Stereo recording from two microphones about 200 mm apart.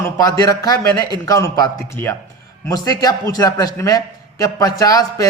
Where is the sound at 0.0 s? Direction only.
15° left (ahead or behind).